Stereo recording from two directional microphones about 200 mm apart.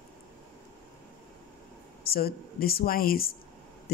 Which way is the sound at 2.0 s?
50° left (ahead or behind).